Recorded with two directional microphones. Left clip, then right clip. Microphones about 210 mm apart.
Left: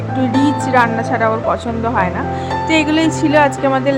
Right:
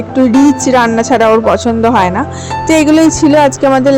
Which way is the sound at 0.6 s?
30° right (ahead or behind).